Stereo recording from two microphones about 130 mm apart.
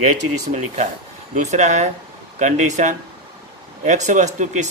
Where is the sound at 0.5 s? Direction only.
60° right (ahead or behind).